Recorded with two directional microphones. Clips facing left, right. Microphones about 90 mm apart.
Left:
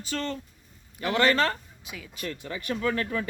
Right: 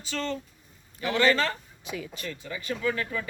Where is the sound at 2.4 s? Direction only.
55° left (ahead or behind).